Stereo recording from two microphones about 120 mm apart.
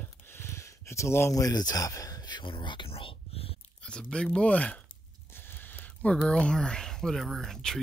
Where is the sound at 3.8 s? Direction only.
10° left (ahead or behind).